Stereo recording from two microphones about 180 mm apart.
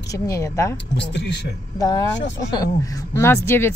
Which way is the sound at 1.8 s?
20° left (ahead or behind).